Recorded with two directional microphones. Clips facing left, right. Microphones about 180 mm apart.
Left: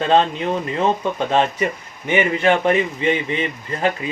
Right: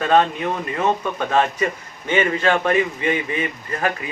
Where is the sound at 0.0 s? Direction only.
25° left (ahead or behind).